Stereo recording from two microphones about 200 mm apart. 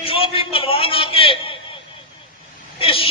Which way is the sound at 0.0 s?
25° left (ahead or behind).